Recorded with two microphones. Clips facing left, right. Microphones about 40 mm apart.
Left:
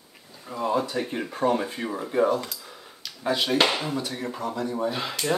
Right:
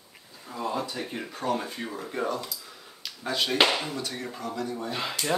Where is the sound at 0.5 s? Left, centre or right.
Centre.